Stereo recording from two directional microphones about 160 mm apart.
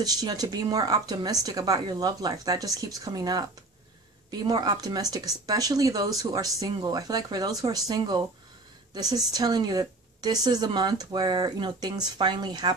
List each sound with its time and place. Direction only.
0.0 s a woman's voice: 25° right (ahead or behind)